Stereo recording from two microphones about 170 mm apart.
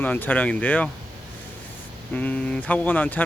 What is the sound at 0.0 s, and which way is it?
Speech, 10° left (ahead or behind).